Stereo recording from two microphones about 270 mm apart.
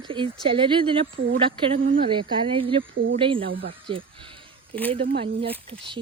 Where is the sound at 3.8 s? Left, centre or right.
Centre.